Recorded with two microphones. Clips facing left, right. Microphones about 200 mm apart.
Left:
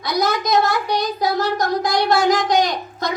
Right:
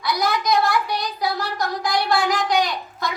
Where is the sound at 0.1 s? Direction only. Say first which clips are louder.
Left 2 dB; 45° left (ahead or behind).